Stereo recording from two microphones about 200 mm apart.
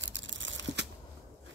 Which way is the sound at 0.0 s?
65° right (ahead or behind).